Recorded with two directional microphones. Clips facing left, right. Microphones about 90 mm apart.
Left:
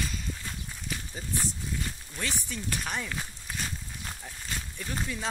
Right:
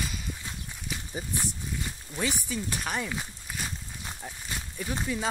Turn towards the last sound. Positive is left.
turn(degrees=-10)  # may be behind; listen again after turning